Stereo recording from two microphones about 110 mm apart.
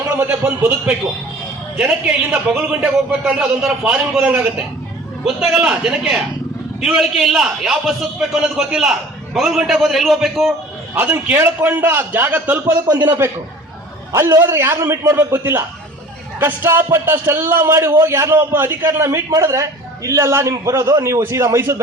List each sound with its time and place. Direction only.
0.1 s a man's voice: 15° right (ahead or behind); by 10.5 s centre (ahead or behind)
10.9 s a man's voice: 15° right (ahead or behind)